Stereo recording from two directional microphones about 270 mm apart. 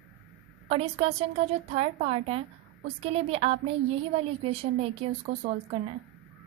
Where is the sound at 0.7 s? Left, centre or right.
Right.